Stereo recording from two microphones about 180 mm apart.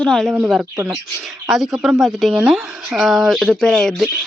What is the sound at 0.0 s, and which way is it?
Speech, 5° left (ahead or behind).